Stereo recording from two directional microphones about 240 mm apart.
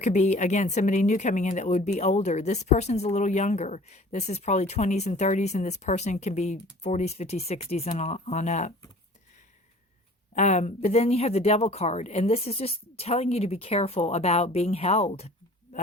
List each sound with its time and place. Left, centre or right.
0.0 s speech: left
10.3 s speech: left